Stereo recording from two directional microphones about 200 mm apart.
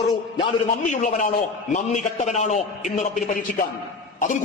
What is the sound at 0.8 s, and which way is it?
A man's voice, 40° left (ahead or behind).